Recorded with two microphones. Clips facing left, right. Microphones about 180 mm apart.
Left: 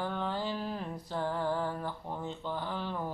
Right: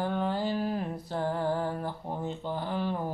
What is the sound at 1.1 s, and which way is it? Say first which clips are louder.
Music: right 3 dB; 45° right (ahead or behind).